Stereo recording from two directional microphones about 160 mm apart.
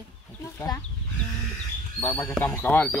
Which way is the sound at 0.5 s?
25° left (ahead or behind).